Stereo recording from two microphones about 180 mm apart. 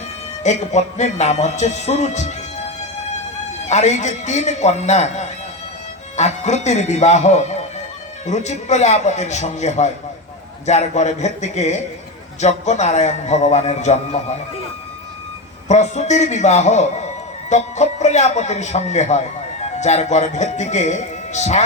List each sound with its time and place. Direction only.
0.4 s music: 40° left (ahead or behind)
3.7 s music: 40° left (ahead or behind)
15.7 s music: 40° left (ahead or behind)